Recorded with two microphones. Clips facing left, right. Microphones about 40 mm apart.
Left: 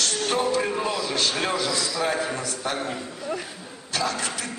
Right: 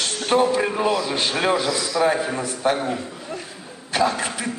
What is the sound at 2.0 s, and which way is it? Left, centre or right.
Speech, centre.